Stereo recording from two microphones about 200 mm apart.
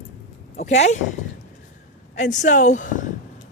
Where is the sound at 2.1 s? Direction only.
40° left (ahead or behind).